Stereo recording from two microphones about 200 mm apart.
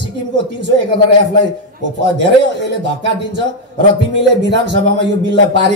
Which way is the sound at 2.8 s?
60° right (ahead or behind).